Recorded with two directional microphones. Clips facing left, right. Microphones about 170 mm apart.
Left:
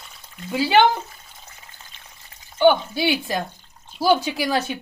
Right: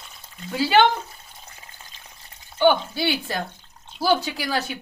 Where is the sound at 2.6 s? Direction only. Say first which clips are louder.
Left 2 dB; 15° left (ahead or behind).